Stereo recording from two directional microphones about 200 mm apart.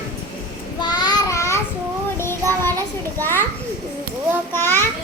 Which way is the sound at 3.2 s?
10° left (ahead or behind).